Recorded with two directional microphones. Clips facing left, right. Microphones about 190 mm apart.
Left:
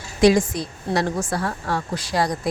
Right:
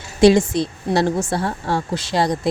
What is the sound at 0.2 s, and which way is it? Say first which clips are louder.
A woman's voice: right 3 dB; 30° right (ahead or behind).